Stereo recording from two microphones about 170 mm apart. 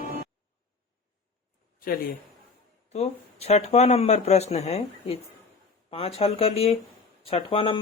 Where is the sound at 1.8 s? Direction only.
60° left (ahead or behind).